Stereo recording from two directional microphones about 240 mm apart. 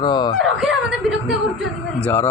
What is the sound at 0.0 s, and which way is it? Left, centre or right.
Speech, centre.